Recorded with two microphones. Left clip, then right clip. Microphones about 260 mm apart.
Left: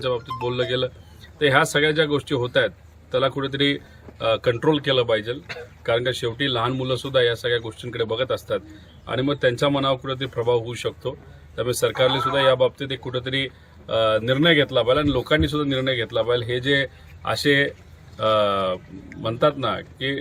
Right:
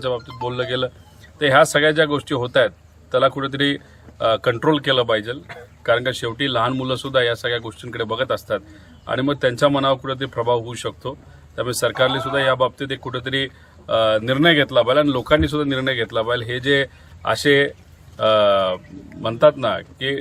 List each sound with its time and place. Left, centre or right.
0.0 s speech: centre